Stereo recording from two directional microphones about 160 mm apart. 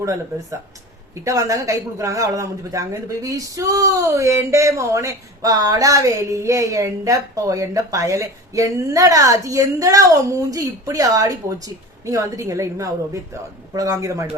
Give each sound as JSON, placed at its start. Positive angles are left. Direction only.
{"t": 1.2, "sound": "speech", "side_deg": -20}